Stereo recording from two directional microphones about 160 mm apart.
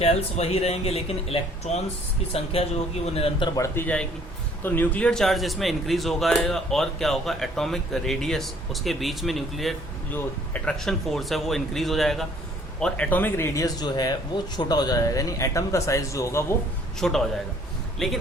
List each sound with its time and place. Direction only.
0.0 s speech: 40° left (ahead or behind)
3.5 s speech: 20° left (ahead or behind)
17.0 s speech: centre (ahead or behind)